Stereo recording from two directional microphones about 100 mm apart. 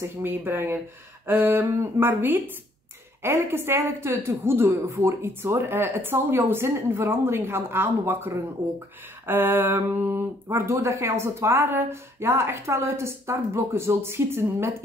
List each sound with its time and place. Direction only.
0.0 s speech: 20° right (ahead or behind)